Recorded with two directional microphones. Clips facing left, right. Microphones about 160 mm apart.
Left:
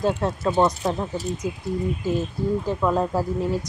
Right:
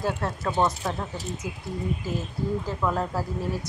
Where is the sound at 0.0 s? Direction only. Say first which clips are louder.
Left 5 dB; 15° left (ahead or behind).